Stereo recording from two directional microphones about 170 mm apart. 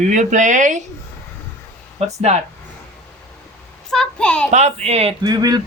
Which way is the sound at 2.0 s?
40° right (ahead or behind).